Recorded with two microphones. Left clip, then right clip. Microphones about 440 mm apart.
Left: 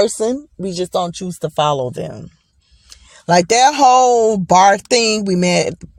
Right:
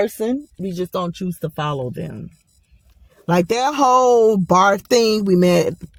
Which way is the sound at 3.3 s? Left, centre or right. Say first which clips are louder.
Left 6 dB; right.